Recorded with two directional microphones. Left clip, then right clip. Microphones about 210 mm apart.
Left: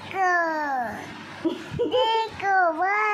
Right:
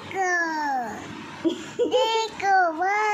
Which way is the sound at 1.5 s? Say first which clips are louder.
Right 2 dB; centre (ahead or behind).